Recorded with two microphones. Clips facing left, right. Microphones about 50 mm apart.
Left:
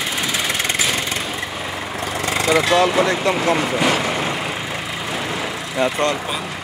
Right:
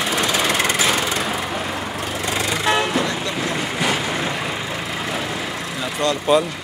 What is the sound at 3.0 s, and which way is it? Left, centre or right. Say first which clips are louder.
Speech: left 6 dB; left.